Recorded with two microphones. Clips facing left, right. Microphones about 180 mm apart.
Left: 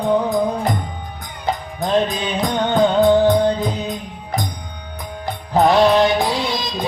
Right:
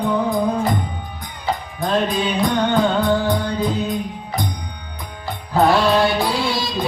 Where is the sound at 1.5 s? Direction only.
20° left (ahead or behind).